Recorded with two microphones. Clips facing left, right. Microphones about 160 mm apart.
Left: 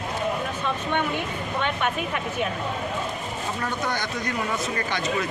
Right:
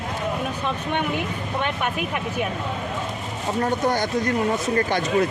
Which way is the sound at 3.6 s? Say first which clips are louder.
Right 8 dB; 40° right (ahead or behind).